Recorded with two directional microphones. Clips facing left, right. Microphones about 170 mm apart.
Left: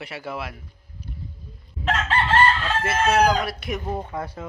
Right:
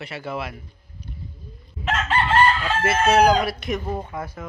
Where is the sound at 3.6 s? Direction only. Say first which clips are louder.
Right 2 dB; 10° left (ahead or behind).